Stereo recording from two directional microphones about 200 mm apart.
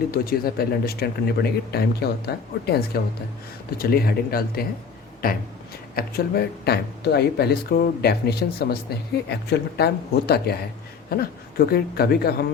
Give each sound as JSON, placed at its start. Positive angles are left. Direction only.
{"t": 0.1, "sound": "speech", "side_deg": 50}